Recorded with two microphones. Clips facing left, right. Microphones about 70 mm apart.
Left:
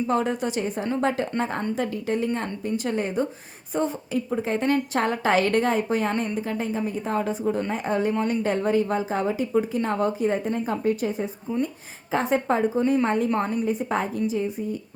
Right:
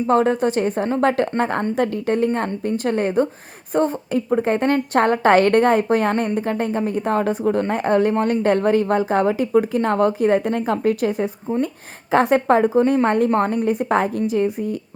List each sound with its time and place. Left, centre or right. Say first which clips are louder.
0.1 s a woman's voice: right 11 dB; right
11.5 s a woman's voice: right 5 dB; right